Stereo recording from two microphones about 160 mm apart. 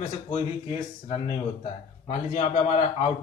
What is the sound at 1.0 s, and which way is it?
A man's voice, 35° left (ahead or behind).